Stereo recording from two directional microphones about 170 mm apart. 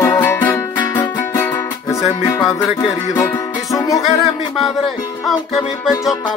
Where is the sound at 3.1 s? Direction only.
20° left (ahead or behind).